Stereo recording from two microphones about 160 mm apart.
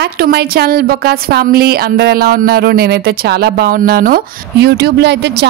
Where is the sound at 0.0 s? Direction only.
80° right.